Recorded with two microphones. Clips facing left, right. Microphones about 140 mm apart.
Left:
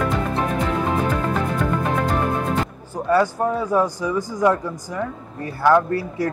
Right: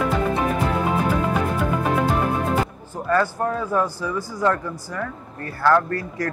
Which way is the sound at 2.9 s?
15° left (ahead or behind).